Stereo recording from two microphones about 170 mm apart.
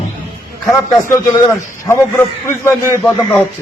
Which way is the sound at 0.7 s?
20° left (ahead or behind).